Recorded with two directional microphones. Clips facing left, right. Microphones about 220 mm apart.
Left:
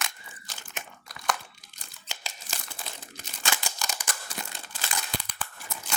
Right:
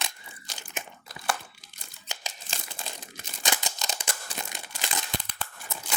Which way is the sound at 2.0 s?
15° right (ahead or behind).